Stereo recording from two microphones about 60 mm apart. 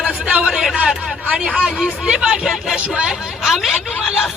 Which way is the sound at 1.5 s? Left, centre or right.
Centre.